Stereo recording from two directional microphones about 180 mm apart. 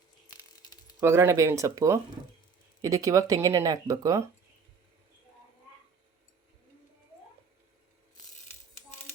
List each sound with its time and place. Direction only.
1.0 s speech: 15° right (ahead or behind)